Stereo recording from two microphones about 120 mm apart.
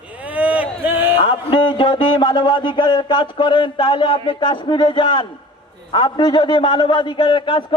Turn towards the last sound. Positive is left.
turn(degrees=45)  # may be behind; listen again after turning